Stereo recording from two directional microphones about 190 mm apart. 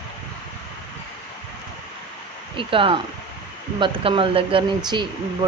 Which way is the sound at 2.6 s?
25° right (ahead or behind).